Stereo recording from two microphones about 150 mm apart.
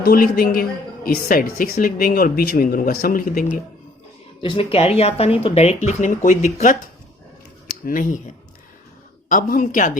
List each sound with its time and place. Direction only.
0.0 s a woman's voice: 75° left (ahead or behind)
4.4 s speech: 35° left (ahead or behind); by 6.7 s 55° left (ahead or behind)
7.9 s speech: 60° left (ahead or behind)
9.3 s speech: 60° left (ahead or behind)